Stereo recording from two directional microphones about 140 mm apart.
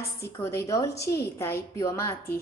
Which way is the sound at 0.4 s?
20° left (ahead or behind).